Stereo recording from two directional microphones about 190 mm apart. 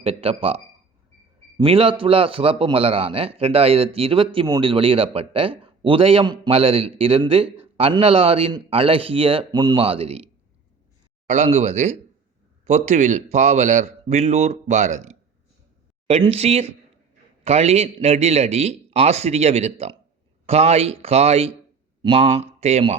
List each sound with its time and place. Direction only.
0.0 s a man's voice: 30° right (ahead or behind)
11.3 s a man's voice: 35° right (ahead or behind)